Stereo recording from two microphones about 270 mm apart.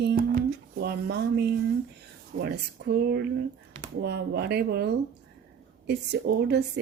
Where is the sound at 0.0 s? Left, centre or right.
Right.